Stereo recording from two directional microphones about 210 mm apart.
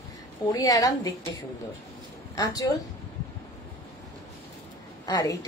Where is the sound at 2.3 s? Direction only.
15° left (ahead or behind).